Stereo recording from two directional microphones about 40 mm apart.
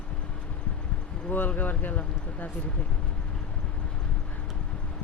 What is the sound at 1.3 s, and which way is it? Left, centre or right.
Speech, left.